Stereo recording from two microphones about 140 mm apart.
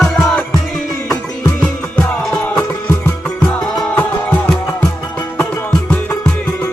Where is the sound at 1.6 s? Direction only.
10° left (ahead or behind).